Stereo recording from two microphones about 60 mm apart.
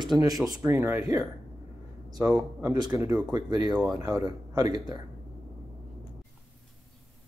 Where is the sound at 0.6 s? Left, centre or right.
Right.